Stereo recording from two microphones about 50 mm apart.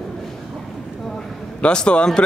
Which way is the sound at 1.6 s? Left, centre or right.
Centre.